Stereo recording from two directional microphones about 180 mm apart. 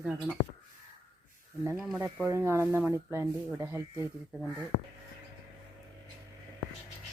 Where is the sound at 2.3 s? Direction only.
15° right (ahead or behind).